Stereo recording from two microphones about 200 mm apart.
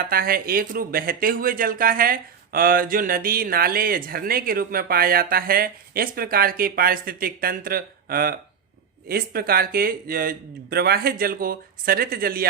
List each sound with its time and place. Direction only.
0.1 s speech: 45° right (ahead or behind)